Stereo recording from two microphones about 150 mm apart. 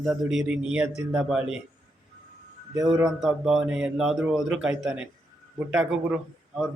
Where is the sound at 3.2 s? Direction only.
5° right (ahead or behind).